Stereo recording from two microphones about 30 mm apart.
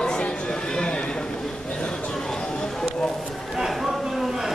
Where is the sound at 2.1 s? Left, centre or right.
Left.